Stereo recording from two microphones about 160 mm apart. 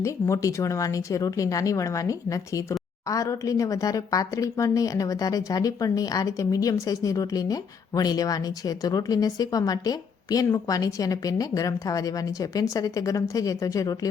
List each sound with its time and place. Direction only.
0.0 s a woman's voice: 20° left (ahead or behind)